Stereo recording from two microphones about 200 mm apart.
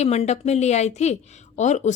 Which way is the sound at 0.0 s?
30° left (ahead or behind).